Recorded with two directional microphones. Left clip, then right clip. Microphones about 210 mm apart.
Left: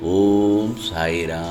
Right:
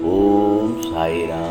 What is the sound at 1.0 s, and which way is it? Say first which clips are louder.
Speech: right 1 dB; 35° left (ahead or behind).